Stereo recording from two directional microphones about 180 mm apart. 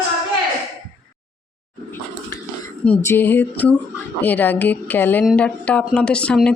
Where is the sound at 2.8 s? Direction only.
10° left (ahead or behind).